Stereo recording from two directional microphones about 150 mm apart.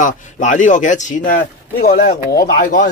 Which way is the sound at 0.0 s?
55° left (ahead or behind).